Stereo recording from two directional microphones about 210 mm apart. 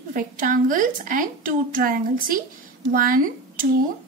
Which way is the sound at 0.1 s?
40° right (ahead or behind).